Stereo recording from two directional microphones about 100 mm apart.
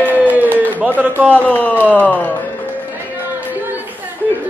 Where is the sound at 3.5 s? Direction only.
20° right (ahead or behind).